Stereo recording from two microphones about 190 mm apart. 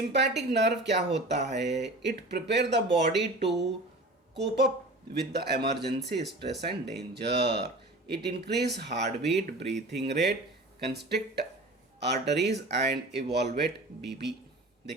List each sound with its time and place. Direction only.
0.1 s speech: 65° right (ahead or behind)